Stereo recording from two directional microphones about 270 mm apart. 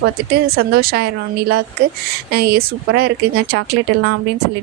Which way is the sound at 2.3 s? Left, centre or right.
Right.